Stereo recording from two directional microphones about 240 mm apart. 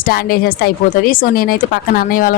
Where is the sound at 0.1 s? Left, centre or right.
Left.